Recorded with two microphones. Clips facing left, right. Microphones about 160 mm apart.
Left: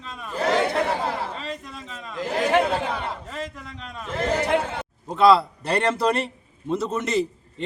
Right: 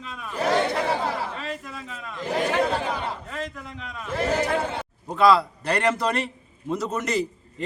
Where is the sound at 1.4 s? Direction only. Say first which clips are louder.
Even; 5° right (ahead or behind).